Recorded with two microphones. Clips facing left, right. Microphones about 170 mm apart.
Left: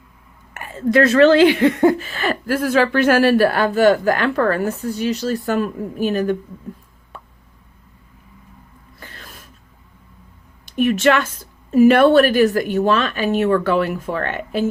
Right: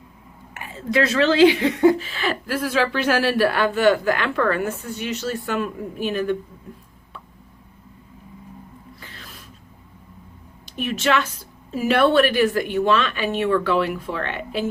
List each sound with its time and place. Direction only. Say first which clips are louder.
0.5 s a woman's voice: left 6 dB; 50° left (ahead or behind)
7.1 s plop: left 3 dB; 50° left (ahead or behind)
9.0 s a sound: left 2 dB; 50° left (ahead or behind)
10.8 s speech: left 6 dB; 50° left (ahead or behind)